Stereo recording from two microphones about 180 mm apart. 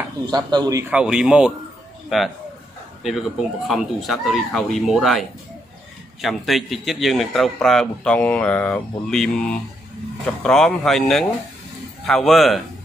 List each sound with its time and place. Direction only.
0.3 s a man's voice: 25° right (ahead or behind)
0.9 s a man's voice: 5° right (ahead or behind)
6.2 s a man's voice: centre (ahead or behind)